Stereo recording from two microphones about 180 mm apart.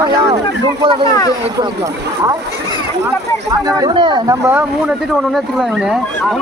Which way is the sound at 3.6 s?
20° right (ahead or behind).